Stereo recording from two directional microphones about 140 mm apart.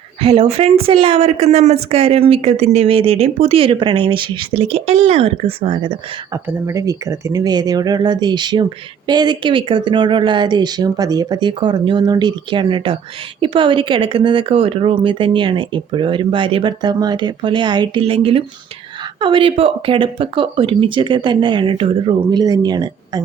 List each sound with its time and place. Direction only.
0.2 s a woman's voice: 45° right (ahead or behind)
6.3 s speech: 20° right (ahead or behind)